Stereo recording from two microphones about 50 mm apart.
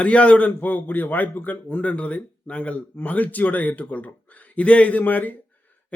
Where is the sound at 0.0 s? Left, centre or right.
Left.